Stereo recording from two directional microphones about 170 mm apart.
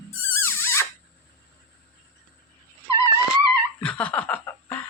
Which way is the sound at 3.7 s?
10° left (ahead or behind).